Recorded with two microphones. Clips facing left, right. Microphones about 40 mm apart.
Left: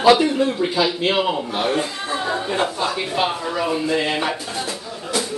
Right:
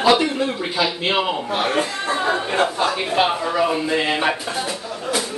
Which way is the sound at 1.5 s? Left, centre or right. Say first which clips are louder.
Right 1 dB; right.